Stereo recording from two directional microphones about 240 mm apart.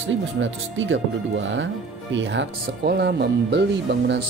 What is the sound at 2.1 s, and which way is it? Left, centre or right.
Speech, right.